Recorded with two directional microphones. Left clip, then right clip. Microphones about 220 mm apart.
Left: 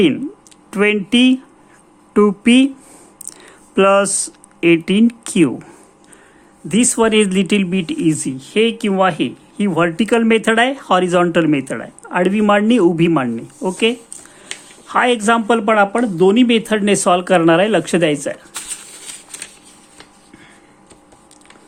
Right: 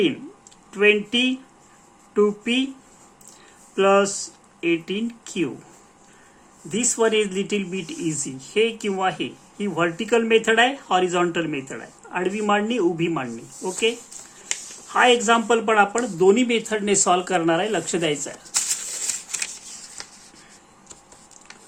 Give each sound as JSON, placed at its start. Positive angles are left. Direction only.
{"t": 0.7, "sound": "speech", "side_deg": 50}
{"t": 3.8, "sound": "speech", "side_deg": 50}
{"t": 6.7, "sound": "speech", "side_deg": 45}